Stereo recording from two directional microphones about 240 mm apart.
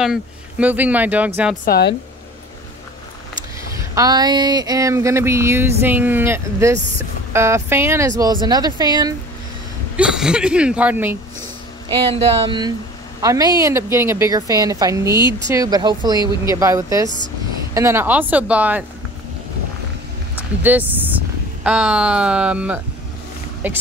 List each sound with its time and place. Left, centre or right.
0.0 s speech: centre
1.6 s speech: left
3.7 s speech: centre
9.9 s speech: centre
11.9 s speech: right
15.1 s speech: centre
15.4 s speech: centre
20.6 s speech: centre